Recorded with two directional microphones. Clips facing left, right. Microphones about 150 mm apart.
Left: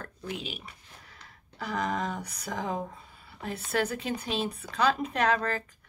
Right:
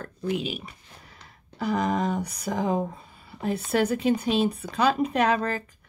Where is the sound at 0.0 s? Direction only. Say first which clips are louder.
Right 9 dB; 10° right (ahead or behind).